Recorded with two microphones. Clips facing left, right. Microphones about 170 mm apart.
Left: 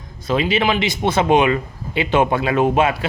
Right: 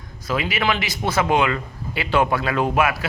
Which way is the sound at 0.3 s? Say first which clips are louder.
Left 5 dB; 25° left (ahead or behind).